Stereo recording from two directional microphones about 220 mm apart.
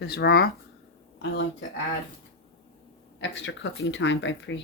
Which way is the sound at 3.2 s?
55° left (ahead or behind).